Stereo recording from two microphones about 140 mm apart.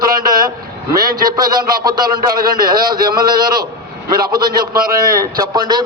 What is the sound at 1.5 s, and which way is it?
A man's voice, 30° right (ahead or behind).